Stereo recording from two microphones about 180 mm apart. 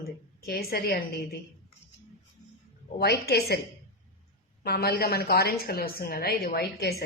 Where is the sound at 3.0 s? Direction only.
65° left (ahead or behind).